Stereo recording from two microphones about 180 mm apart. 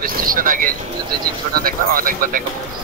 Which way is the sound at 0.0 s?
50° right (ahead or behind).